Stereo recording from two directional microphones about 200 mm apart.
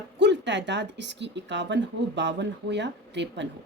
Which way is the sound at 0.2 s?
60° right (ahead or behind).